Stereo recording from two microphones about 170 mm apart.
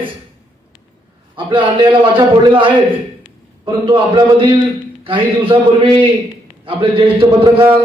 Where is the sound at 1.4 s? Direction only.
30° right (ahead or behind).